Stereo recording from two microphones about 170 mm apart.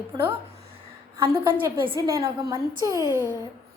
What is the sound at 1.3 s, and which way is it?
A woman's voice, 15° right (ahead or behind).